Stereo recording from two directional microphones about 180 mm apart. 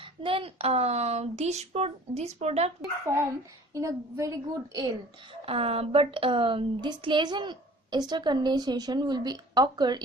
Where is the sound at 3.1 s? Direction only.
15° right (ahead or behind).